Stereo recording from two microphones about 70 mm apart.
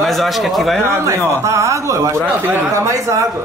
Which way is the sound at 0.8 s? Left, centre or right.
Right.